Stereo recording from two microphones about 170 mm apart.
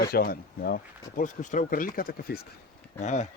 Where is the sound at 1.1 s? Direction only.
50° left (ahead or behind); by 2.5 s 65° left (ahead or behind).